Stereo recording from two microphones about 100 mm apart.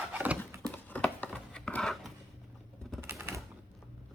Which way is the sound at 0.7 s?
15° left (ahead or behind).